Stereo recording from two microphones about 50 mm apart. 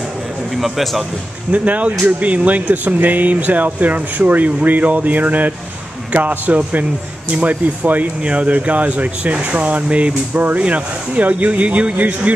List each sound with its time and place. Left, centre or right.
0.6 s speech: centre
1.5 s speech: right
8.2 s speech: right
10.3 s speech: right